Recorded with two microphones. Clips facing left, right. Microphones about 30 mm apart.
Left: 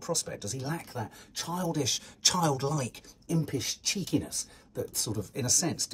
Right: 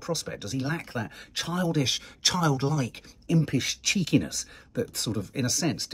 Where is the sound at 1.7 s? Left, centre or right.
Right.